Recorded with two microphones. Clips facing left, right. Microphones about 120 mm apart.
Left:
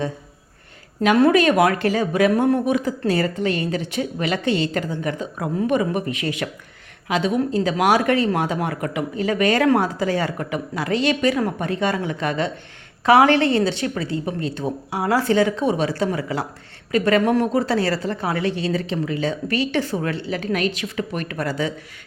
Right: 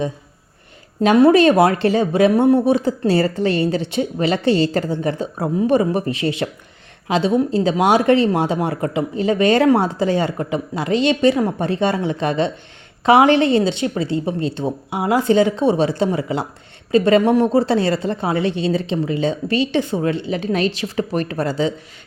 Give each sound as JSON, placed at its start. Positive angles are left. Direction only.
{"t": 1.0, "sound": "a woman's voice", "side_deg": -30}